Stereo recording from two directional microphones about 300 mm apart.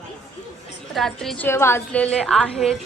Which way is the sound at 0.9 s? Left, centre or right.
Centre.